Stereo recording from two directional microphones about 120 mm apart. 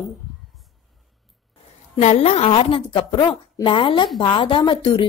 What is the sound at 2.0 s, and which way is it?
A woman's voice, 60° left (ahead or behind).